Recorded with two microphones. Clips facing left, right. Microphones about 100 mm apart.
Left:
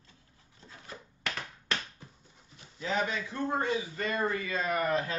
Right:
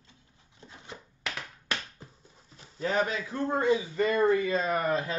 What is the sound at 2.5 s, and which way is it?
Dog, 40° right (ahead or behind).